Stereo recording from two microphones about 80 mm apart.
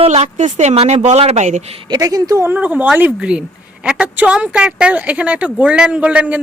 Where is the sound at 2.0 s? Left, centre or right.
Right.